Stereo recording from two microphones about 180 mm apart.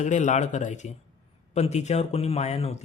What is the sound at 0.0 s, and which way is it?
Speech, 45° left (ahead or behind).